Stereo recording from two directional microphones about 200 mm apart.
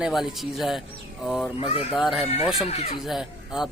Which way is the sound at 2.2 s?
30° left (ahead or behind).